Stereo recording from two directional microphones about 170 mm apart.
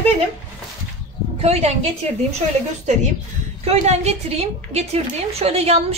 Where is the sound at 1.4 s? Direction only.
40° right (ahead or behind).